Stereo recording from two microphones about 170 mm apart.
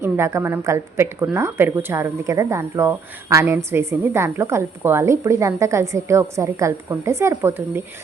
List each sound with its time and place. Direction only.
0.0 s a woman's voice: 15° right (ahead or behind)